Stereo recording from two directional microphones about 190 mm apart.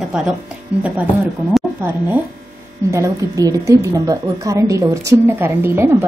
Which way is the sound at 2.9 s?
15° right (ahead or behind).